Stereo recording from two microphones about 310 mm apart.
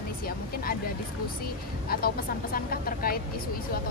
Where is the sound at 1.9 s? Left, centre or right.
Left.